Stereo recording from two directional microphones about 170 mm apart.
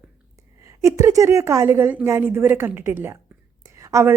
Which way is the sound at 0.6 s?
20° right (ahead or behind).